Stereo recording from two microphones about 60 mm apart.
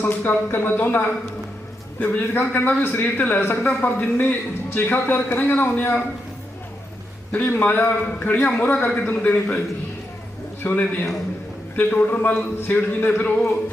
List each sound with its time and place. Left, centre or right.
0.0 s a man's voice: left
7.3 s a man's voice: left
10.6 s a man's voice: left